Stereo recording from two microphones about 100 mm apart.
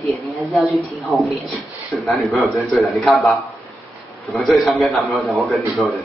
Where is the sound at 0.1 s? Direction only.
Centre (ahead or behind).